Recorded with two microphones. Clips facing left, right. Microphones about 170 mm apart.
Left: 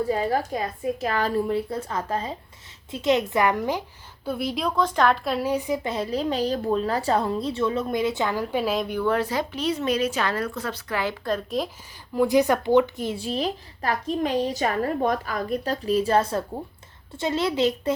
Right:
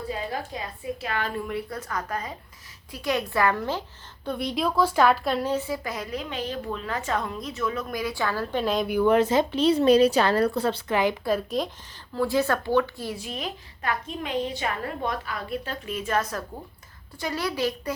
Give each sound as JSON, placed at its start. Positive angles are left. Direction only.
{"t": 0.1, "sound": "a woman's voice", "side_deg": 45}
{"t": 4.3, "sound": "a woman's voice", "side_deg": 5}
{"t": 8.9, "sound": "speech", "side_deg": -15}
{"t": 12.1, "sound": "speech", "side_deg": 15}
{"t": 13.1, "sound": "a woman's voice", "side_deg": 30}